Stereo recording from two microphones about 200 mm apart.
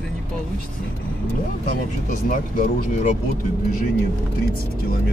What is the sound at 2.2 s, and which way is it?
Speech, 40° left (ahead or behind).